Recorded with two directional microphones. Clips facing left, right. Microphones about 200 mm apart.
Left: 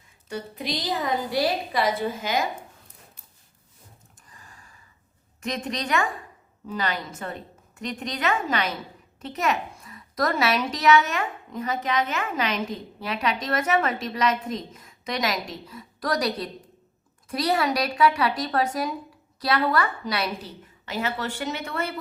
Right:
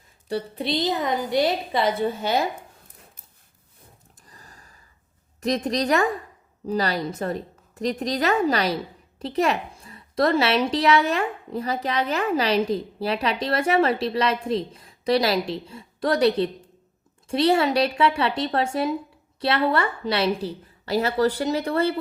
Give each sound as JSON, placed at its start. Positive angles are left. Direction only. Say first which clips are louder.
{"t": 0.3, "sound": "a woman's voice", "louder": "right 5 dB", "side_deg": -30}
{"t": 4.3, "sound": "gasp", "louder": "right 1 dB", "side_deg": -35}
{"t": 5.4, "sound": "a woman's voice", "louder": "right 6 dB", "side_deg": -35}